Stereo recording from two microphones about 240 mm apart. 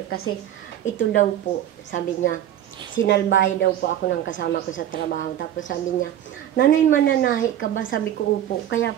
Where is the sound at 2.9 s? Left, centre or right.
Left.